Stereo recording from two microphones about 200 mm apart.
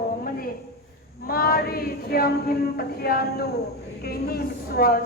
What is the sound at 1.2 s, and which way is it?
A woman's voice, 50° left (ahead or behind).